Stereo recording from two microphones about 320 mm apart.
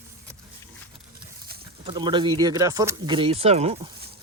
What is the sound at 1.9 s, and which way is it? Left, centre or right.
Speech, centre.